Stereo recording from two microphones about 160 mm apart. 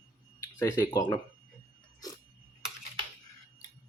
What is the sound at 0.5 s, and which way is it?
Speech, 20° left (ahead or behind).